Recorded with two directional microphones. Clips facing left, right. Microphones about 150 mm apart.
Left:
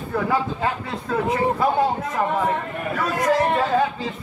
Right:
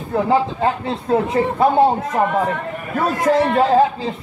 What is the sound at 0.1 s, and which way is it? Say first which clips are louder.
A man's voice: right 6 dB; 25° right (ahead or behind).